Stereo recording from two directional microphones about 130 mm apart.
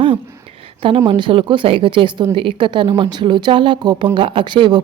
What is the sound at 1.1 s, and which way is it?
A woman's voice, 40° right (ahead or behind).